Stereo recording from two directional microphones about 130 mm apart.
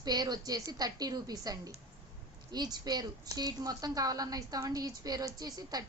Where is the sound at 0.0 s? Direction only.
30° right (ahead or behind).